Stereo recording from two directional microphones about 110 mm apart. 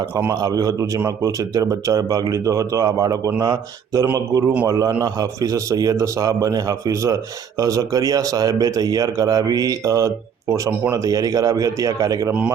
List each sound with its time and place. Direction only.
0.3 s a man's voice: 35° right (ahead or behind)